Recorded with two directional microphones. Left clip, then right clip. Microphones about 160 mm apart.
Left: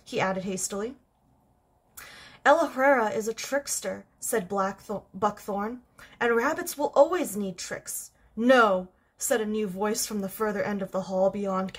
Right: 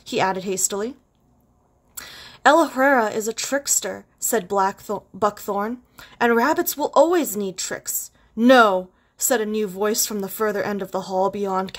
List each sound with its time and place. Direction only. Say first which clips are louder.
0.0 s a woman's voice: right 6 dB; 45° right (ahead or behind)
2.0 s a woman's voice: right 7 dB; 45° right (ahead or behind)